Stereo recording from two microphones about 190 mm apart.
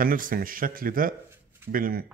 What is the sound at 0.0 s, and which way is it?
Speech, 45° right (ahead or behind).